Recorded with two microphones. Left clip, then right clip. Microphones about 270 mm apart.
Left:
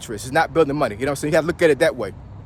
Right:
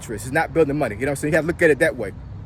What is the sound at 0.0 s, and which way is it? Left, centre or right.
Speech, centre.